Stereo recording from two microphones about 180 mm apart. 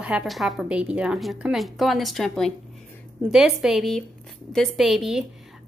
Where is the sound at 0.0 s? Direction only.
5° right (ahead or behind).